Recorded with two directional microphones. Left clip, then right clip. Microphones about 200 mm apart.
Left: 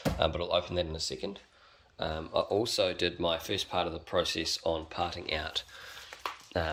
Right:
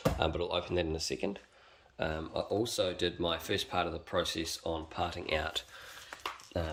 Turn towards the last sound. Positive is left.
turn(degrees=0)  # may be behind; listen again after turning